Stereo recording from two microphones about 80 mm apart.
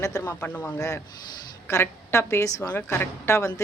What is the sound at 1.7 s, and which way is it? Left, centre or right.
A woman's voice, left.